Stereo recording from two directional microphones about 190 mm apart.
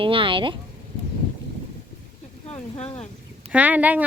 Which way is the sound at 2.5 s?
35° left (ahead or behind).